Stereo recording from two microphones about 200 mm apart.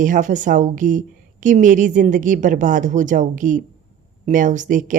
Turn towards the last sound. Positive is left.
turn(degrees=-40)  # may be behind; listen again after turning